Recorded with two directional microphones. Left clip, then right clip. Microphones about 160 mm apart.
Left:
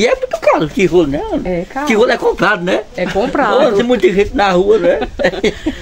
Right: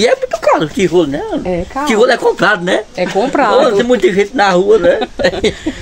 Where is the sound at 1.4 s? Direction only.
20° right (ahead or behind).